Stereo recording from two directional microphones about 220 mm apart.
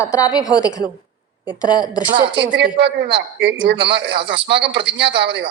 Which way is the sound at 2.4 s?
55° right (ahead or behind).